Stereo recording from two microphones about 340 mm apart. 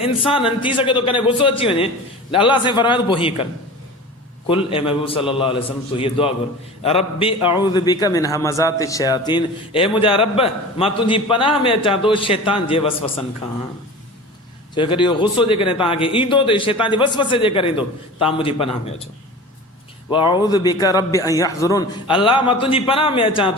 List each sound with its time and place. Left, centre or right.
0.3 s a man's voice: centre
4.4 s a man's voice: centre
14.8 s a man's voice: centre
20.1 s a man's voice: centre